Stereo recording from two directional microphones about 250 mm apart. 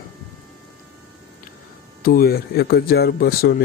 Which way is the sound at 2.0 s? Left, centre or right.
Left.